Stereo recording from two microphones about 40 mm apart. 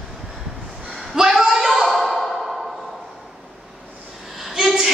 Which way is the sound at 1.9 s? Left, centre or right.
Centre.